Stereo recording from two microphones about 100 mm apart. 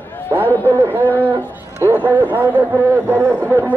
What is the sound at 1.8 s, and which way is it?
Speech, 20° right (ahead or behind).